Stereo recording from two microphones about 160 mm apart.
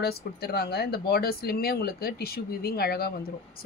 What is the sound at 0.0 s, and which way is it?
Speech, 80° left.